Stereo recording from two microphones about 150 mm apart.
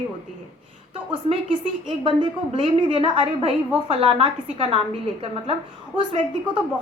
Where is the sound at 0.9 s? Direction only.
35° right (ahead or behind).